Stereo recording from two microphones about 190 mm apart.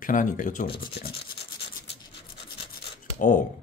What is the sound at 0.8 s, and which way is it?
Rub, 55° left (ahead or behind).